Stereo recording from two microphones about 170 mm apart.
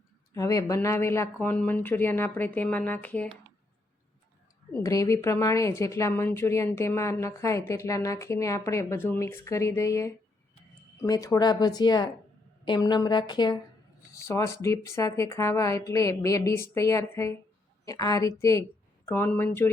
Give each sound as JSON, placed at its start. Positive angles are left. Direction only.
{"t": 0.3, "sound": "a woman's voice", "side_deg": 20}
{"t": 4.7, "sound": "a woman's voice", "side_deg": 20}